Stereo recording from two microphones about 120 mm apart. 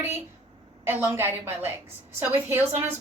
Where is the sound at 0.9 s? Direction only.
20° right (ahead or behind).